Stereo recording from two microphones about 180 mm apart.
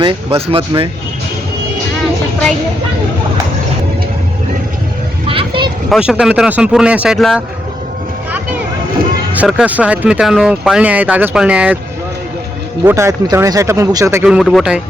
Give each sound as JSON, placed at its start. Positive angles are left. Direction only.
{"t": 0.0, "sound": "speech", "side_deg": -30}
{"t": 5.2, "sound": "vehicle", "side_deg": -30}
{"t": 5.9, "sound": "speech", "side_deg": -5}
{"t": 9.4, "sound": "speech", "side_deg": -5}
{"t": 12.8, "sound": "speech", "side_deg": -15}
{"t": 14.3, "sound": "speech", "side_deg": 0}